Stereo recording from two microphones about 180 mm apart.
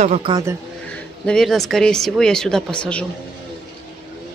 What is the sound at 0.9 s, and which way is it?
Speech, 5° left (ahead or behind).